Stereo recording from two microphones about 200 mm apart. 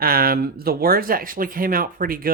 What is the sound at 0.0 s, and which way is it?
Speech, 50° right (ahead or behind).